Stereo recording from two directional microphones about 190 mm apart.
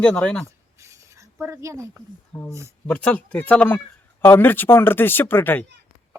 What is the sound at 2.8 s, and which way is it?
Speech, 5° left (ahead or behind).